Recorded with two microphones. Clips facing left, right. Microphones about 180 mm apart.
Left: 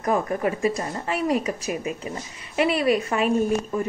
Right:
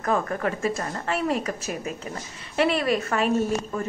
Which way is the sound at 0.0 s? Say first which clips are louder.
Left 2 dB; 15° left (ahead or behind).